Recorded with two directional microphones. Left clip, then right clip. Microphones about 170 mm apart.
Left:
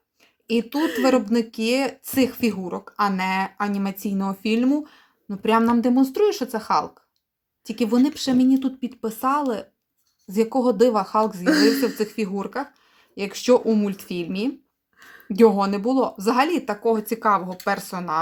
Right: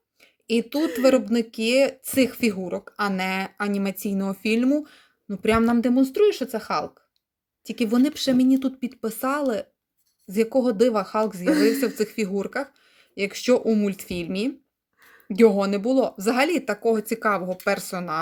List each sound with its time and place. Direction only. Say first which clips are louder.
0.2 s a sound: even; 30° right (ahead or behind)
1.0 s speech: right 2 dB; 20° right (ahead or behind)
11.4 s speech: left 1 dB; 30° left (ahead or behind)
11.8 s speech: left 1 dB; 30° right (ahead or behind)